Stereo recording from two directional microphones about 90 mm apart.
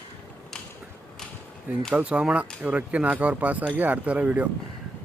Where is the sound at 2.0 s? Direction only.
15° right (ahead or behind).